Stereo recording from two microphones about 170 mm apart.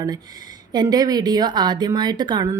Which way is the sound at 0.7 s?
25° right (ahead or behind).